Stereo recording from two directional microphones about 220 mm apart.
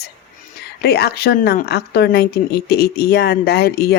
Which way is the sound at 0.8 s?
45° left (ahead or behind).